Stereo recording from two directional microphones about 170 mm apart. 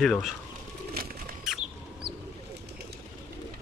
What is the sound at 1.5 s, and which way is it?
Chicken, 5° right (ahead or behind).